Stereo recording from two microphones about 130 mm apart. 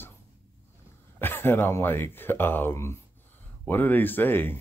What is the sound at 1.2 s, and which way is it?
Speech, 15° left (ahead or behind).